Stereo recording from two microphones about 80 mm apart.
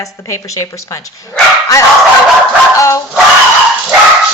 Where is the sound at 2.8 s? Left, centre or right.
Left.